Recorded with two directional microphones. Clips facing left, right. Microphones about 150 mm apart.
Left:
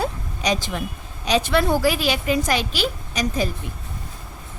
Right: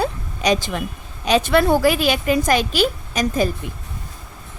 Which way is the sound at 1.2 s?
55° right (ahead or behind).